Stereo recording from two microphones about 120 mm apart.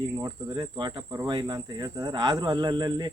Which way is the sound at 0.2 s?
30° right (ahead or behind).